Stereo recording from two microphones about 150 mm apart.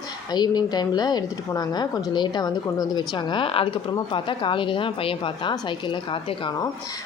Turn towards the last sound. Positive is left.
turn(degrees=35)  # may be behind; listen again after turning